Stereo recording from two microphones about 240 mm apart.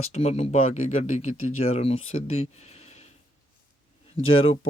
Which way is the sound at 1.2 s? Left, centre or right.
Left.